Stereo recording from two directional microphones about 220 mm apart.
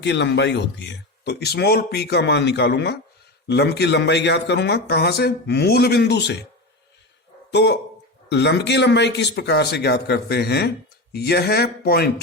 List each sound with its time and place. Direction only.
0.0 s speech: 50° left (ahead or behind)
7.5 s speech: 50° left (ahead or behind)